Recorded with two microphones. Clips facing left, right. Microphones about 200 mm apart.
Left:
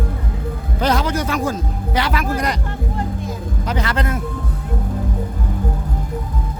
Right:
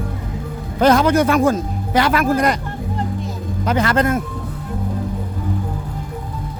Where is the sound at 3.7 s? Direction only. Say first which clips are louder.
Right 6 dB; 50° right (ahead or behind).